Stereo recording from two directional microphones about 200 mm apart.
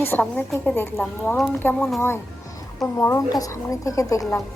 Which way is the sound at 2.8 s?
15° left (ahead or behind).